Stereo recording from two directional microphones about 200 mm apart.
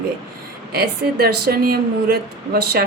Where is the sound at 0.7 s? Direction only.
50° right (ahead or behind).